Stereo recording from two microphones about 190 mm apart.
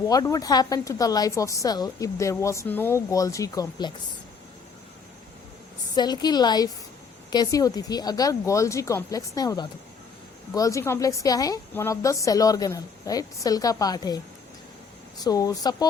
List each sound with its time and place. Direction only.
0.1 s a woman's voice: 20° left (ahead or behind)
6.0 s a woman's voice: 20° left (ahead or behind)
15.2 s a woman's voice: 20° left (ahead or behind)